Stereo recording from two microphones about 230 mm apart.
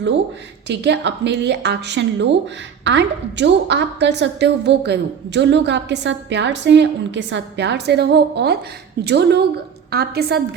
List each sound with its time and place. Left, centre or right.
0.7 s a woman's voice: right